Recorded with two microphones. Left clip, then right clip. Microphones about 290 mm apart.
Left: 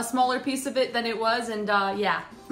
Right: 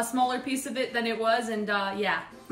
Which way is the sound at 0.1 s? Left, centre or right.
Centre.